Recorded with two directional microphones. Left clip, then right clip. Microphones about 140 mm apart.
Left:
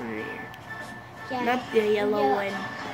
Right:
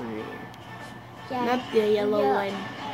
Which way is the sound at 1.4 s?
15° right (ahead or behind).